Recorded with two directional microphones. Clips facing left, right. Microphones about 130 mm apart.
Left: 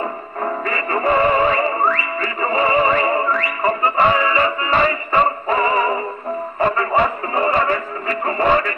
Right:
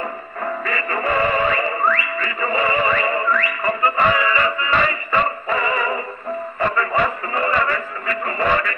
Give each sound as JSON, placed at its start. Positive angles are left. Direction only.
{"t": 0.4, "sound": "music", "side_deg": 30}